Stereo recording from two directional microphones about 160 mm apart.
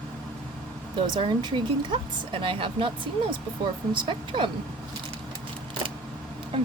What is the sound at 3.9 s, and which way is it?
Speech, 30° right (ahead or behind).